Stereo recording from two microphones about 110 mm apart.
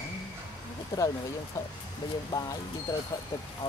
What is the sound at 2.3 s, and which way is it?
Speech, 30° left (ahead or behind).